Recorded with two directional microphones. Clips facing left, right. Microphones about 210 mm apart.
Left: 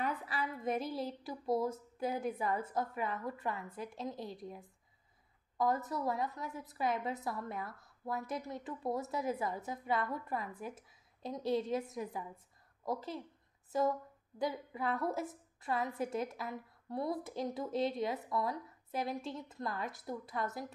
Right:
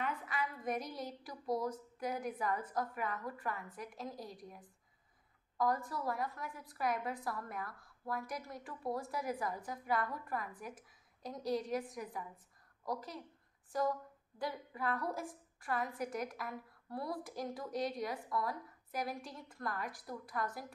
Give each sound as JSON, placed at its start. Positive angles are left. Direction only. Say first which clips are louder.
{"t": 0.0, "sound": "a woman's voice", "louder": "left 2 dB", "side_deg": 35}